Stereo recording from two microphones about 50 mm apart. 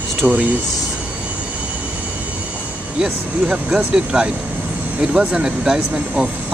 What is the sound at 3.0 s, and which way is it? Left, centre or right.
Speech, centre.